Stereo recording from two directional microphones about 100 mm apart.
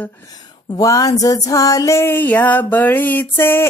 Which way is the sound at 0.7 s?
35° left (ahead or behind).